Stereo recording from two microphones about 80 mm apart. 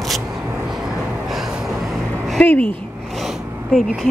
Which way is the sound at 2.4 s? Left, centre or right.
Centre.